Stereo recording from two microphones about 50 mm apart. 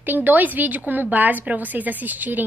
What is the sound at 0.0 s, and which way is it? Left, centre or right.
A woman's voice, right.